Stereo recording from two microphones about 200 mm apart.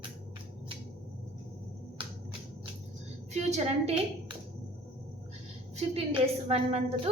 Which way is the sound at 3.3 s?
35° right (ahead or behind).